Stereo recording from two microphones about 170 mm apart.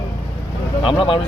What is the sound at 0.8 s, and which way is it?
Speech, 30° left (ahead or behind).